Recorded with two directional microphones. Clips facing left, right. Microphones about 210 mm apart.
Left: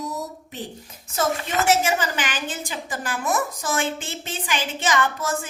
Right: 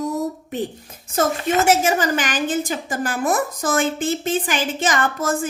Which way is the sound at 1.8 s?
45° right (ahead or behind).